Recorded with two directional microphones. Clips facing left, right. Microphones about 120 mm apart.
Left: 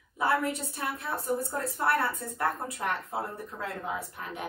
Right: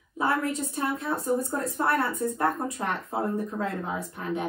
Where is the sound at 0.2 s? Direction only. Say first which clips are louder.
Right 1 dB; 20° right (ahead or behind).